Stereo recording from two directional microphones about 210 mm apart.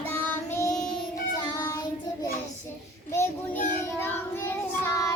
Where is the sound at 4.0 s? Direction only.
10° left (ahead or behind).